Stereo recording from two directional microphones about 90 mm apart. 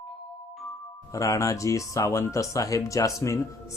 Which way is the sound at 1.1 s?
35° left (ahead or behind).